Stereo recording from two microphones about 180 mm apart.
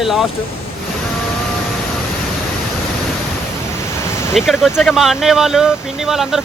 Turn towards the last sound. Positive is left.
turn(degrees=0)  # may be behind; listen again after turning